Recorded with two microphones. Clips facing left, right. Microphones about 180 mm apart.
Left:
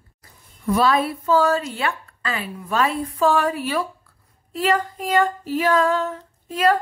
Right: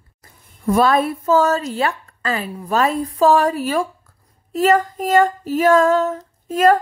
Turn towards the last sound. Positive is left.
turn(degrees=-45)  # may be behind; listen again after turning